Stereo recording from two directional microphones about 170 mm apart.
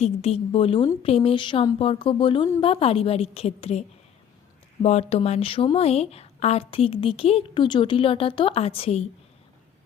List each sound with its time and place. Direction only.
0.0 s speech: 35° left (ahead or behind)